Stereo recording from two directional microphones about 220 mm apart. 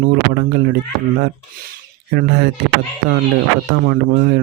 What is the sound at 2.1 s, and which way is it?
Speech, 50° right (ahead or behind).